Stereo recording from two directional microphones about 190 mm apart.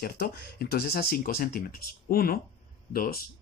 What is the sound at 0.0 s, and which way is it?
Speech, 55° left (ahead or behind).